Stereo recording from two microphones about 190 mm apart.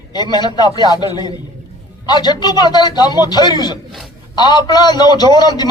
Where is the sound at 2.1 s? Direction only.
20° left (ahead or behind).